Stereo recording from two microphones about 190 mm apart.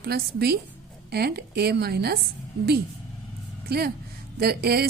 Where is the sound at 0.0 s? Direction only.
55° right (ahead or behind).